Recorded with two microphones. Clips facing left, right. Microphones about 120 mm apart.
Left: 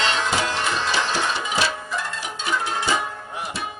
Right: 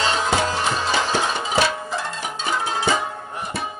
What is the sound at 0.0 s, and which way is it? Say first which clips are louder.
Music: right 2 dB; 40° right (ahead or behind).